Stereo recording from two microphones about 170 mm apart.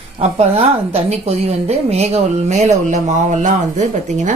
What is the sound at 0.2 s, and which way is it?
A woman's voice, 40° right (ahead or behind).